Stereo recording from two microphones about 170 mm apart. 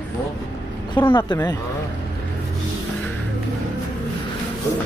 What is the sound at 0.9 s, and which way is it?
Speech, 30° left (ahead or behind).